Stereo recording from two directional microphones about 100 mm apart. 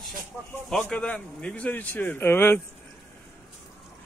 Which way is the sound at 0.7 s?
5° left (ahead or behind).